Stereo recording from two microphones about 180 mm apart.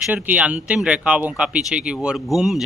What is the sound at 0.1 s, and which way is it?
Speech, 10° right (ahead or behind).